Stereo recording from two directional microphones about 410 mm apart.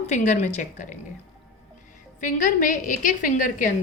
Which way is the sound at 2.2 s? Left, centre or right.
Centre.